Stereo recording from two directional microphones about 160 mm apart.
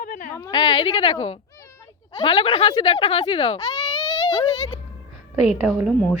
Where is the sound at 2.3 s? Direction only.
35° left (ahead or behind).